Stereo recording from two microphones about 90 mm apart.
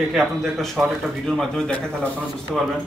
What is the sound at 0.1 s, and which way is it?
Speech, centre (ahead or behind).